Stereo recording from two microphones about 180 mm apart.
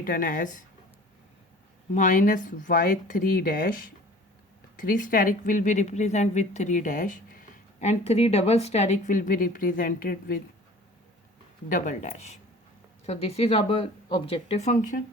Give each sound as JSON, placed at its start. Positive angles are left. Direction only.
{"t": 0.0, "sound": "a woman's voice", "side_deg": 50}
{"t": 1.9, "sound": "a woman's voice", "side_deg": 45}
{"t": 11.7, "sound": "speech", "side_deg": 45}